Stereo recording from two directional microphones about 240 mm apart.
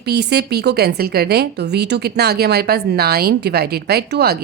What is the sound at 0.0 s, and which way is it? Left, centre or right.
A woman's voice, right.